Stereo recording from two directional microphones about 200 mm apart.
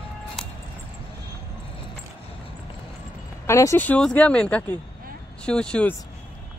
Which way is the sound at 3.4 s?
15° left (ahead or behind).